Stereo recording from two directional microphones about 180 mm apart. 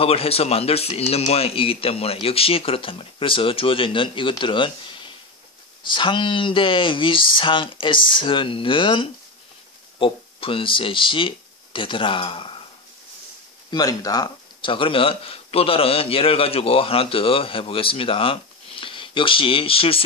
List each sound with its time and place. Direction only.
0.0 s speech: 35° left (ahead or behind)
13.7 s speech: 20° left (ahead or behind)